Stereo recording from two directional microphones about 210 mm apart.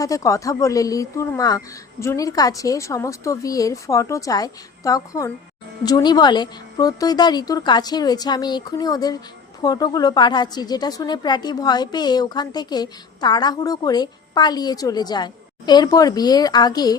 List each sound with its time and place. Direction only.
0.0 s a woman's voice: 15° left (ahead or behind)